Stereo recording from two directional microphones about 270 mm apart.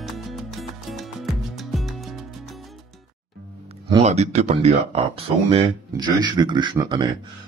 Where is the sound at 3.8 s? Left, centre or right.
Right.